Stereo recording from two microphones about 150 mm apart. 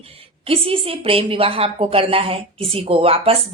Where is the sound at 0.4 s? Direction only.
40° right (ahead or behind).